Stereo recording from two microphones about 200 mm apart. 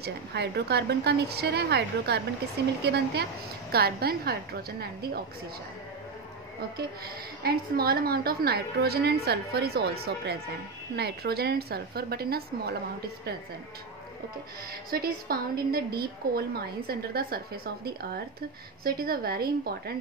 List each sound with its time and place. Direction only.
0.0 s a woman's voice: 55° right (ahead or behind)
7.4 s a woman's voice: 50° right (ahead or behind)
14.9 s a woman's voice: 50° right (ahead or behind)
18.9 s a woman's voice: 50° right (ahead or behind)